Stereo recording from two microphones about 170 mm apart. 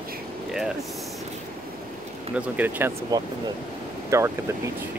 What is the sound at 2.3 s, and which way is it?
Speech, 10° right (ahead or behind).